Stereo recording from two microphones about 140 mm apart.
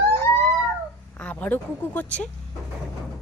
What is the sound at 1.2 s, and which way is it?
Speech, 10° left (ahead or behind).